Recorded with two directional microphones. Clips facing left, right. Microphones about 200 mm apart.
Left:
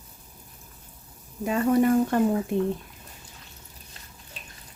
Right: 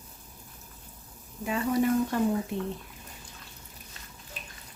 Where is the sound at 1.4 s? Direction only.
50° left (ahead or behind).